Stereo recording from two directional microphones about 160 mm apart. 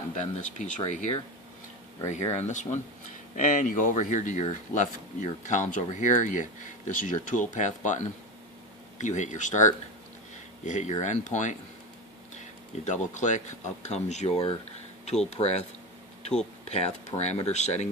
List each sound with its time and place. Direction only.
0.1 s speech: 50° left (ahead or behind)
12.8 s speech: 50° left (ahead or behind)
16.6 s speech: 45° left (ahead or behind)